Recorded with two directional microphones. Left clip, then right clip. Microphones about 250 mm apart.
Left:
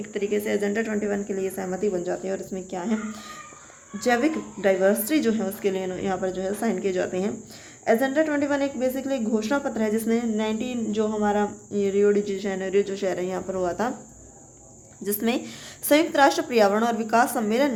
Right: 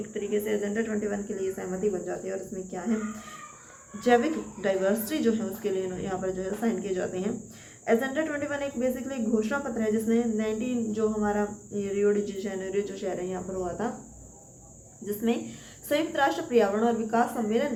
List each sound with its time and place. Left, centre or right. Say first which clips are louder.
0.1 s speech: left 4 dB; left
3.9 s speech: left 1 dB; left
15.0 s speech: left 3 dB; left